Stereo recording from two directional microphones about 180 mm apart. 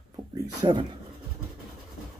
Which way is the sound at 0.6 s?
25° right (ahead or behind).